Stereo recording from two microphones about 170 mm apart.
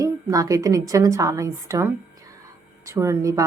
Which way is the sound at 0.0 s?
20° right (ahead or behind).